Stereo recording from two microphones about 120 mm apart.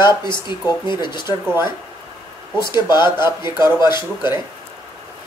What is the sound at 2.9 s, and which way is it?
Speech, 35° left (ahead or behind).